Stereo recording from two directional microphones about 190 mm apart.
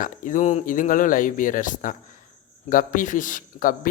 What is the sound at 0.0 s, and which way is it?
Speech, 45° left (ahead or behind).